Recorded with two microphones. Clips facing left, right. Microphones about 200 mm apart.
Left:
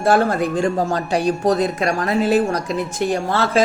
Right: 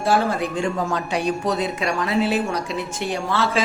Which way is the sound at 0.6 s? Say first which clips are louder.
Left 4 dB; 35° left (ahead or behind).